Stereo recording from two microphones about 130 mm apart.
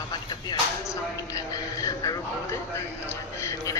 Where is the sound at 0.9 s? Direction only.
25° left (ahead or behind).